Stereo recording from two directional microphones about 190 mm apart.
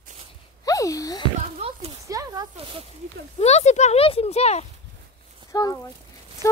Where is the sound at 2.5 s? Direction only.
30° right (ahead or behind).